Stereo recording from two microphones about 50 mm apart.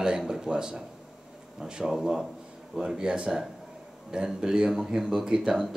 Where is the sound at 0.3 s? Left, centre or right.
Centre.